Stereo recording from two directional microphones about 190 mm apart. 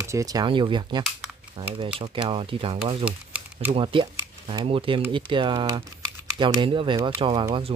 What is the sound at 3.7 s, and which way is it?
Speech, 25° right (ahead or behind).